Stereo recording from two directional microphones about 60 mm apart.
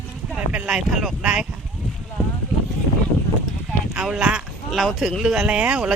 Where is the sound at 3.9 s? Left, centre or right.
Centre.